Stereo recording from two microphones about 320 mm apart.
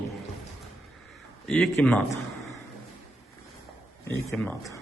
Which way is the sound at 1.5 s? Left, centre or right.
Centre.